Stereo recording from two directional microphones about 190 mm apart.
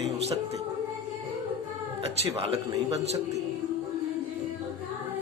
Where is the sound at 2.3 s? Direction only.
30° right (ahead or behind).